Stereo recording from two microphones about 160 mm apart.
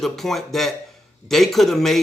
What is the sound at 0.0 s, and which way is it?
Speech, centre (ahead or behind).